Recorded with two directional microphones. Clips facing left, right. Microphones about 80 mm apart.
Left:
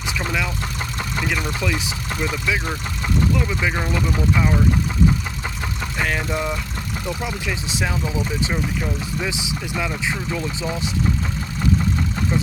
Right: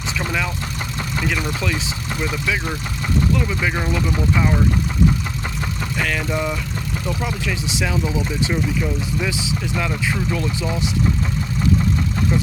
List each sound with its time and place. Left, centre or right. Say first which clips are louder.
0.2 s vehicle: right 1 dB; centre
1.1 s speech: right 1 dB; centre
6.0 s speech: even; left
6.3 s speech: right 1 dB; centre
7.9 s speech: right 2 dB; centre
9.2 s speech: right 2 dB; centre